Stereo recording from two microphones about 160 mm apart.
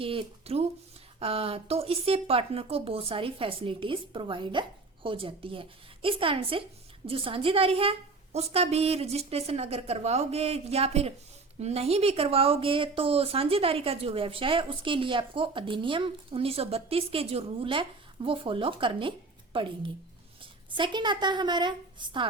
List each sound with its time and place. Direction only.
0.0 s a woman's voice: 35° right (ahead or behind)